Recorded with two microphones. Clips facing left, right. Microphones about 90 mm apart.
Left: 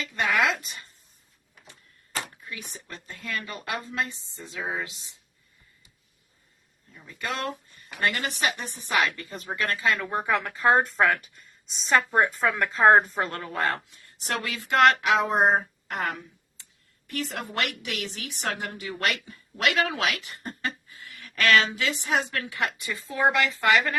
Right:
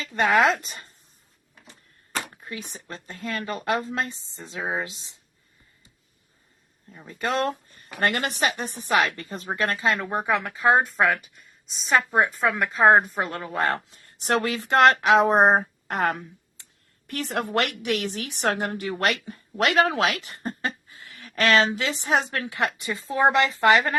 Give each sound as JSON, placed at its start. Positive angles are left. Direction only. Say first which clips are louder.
{"t": 0.0, "sound": "a woman's voice", "louder": "right 5 dB", "side_deg": -35}
{"t": 2.4, "sound": "a woman's voice", "louder": "right 4 dB", "side_deg": -35}
{"t": 6.9, "sound": "a woman's voice", "louder": "right 6 dB", "side_deg": -35}
{"t": 7.9, "sound": "speech", "louder": "right 3 dB", "side_deg": -45}
{"t": 8.3, "sound": "a woman's voice", "louder": "right 3 dB", "side_deg": -35}
{"t": 10.3, "sound": "a woman's voice", "louder": "right 1 dB", "side_deg": -5}
{"t": 13.6, "sound": "a woman's voice", "louder": "right 3 dB", "side_deg": -25}